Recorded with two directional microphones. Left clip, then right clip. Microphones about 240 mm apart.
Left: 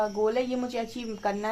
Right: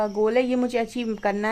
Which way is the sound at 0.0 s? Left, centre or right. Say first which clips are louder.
Right 4 dB; right.